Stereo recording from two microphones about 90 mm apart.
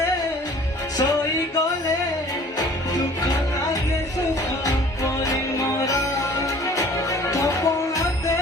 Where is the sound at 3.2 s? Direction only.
40° left (ahead or behind).